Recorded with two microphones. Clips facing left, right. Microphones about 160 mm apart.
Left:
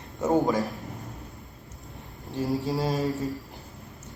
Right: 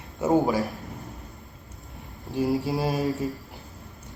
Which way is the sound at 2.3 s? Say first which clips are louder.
Right 3 dB; 10° right (ahead or behind).